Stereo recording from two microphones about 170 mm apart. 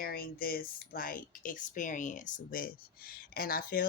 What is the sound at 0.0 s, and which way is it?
Speech, 60° left (ahead or behind).